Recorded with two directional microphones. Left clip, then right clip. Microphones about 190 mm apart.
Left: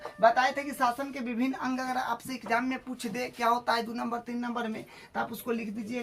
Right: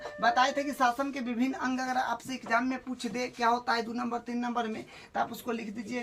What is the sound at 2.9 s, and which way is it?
Speech, 20° left (ahead or behind).